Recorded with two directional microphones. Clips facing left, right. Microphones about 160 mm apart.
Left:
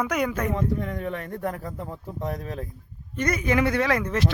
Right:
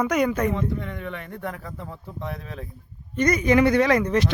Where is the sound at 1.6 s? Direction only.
15° left (ahead or behind).